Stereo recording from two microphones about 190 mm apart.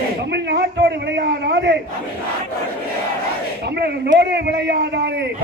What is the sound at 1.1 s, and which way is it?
Speech, 60° right (ahead or behind).